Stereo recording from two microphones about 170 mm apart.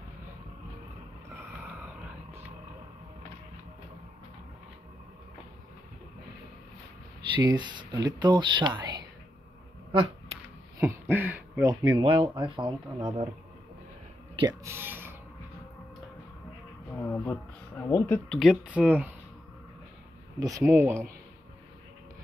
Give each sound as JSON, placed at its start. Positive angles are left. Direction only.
{"t": 7.3, "sound": "speech", "side_deg": -25}
{"t": 9.9, "sound": "a sound", "side_deg": -35}
{"t": 10.8, "sound": "speech", "side_deg": -15}
{"t": 11.8, "sound": "speech", "side_deg": -30}
{"t": 14.6, "sound": "speech", "side_deg": -15}
{"t": 16.9, "sound": "speech", "side_deg": 10}
{"t": 18.4, "sound": "speech", "side_deg": -5}
{"t": 20.3, "sound": "speech", "side_deg": -20}